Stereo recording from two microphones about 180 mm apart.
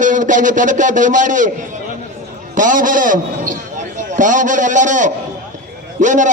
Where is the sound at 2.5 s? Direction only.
45° right (ahead or behind).